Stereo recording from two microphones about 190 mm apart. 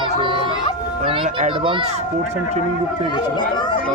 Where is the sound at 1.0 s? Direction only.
25° right (ahead or behind).